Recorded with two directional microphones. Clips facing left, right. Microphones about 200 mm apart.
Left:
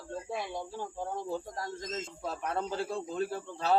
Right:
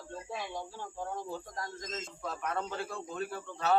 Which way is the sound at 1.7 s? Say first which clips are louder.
Left 3 dB; 30° left (ahead or behind).